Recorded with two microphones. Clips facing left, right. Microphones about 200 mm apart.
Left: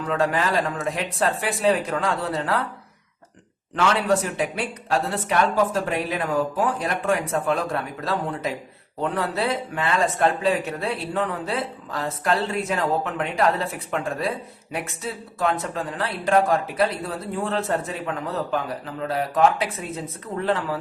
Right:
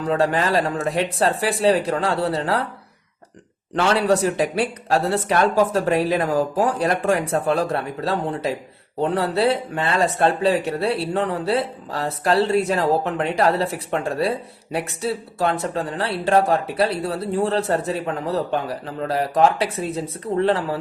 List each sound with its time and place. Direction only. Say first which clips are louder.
0.0 s speech: right 3 dB; 35° right (ahead or behind)
3.8 s speech: right 3 dB; 35° right (ahead or behind)